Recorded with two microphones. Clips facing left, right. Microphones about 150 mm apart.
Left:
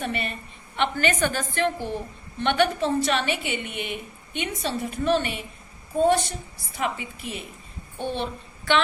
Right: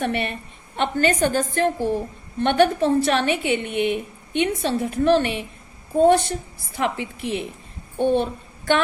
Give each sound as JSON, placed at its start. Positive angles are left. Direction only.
{"t": 0.0, "sound": "a woman's voice", "side_deg": -60}
{"t": 0.8, "sound": "a woman's voice", "side_deg": -40}
{"t": 7.9, "sound": "a child's voice", "side_deg": -50}